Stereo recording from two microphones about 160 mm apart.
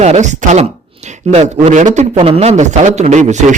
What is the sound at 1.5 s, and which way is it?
Speech, 50° right (ahead or behind).